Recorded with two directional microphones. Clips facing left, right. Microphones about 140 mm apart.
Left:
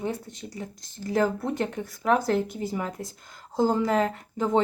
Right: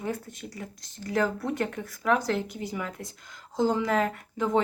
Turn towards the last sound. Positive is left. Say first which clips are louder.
# left 2 dB
turn(degrees=30)  # may be behind; listen again after turning